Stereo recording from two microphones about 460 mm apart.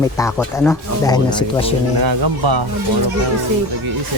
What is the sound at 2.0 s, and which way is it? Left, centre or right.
Speech, right.